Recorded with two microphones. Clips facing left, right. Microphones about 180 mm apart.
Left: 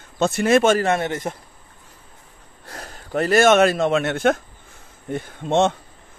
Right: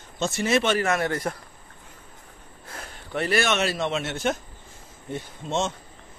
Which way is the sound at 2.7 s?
40° left (ahead or behind).